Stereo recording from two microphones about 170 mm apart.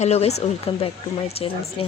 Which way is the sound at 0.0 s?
40° left (ahead or behind).